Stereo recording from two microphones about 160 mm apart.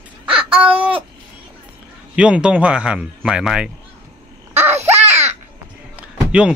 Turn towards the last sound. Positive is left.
turn(degrees=-5)  # may be behind; listen again after turning